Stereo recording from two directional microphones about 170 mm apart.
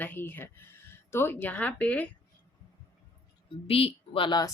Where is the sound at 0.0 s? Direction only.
10° left (ahead or behind).